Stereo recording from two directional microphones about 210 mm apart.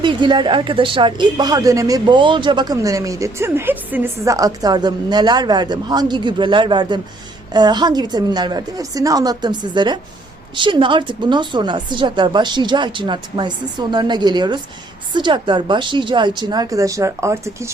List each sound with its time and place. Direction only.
0.0 s speech: 20° right (ahead or behind)